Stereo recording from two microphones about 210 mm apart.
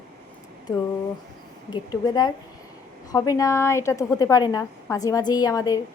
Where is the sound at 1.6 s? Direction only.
20° left (ahead or behind).